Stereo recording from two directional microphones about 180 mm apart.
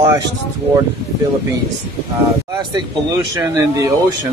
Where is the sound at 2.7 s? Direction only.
20° right (ahead or behind).